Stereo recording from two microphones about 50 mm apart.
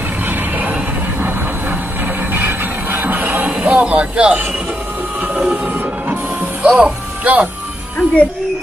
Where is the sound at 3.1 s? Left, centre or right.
Right.